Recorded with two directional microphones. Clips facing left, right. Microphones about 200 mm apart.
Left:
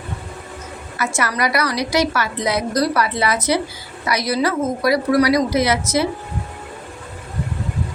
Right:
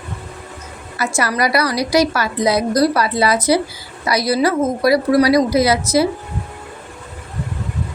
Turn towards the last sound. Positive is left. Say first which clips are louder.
# right 3 dB
turn(degrees=-35)  # may be behind; listen again after turning